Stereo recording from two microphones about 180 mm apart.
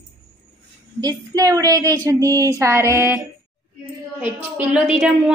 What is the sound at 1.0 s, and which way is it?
Child singing, 20° right (ahead or behind).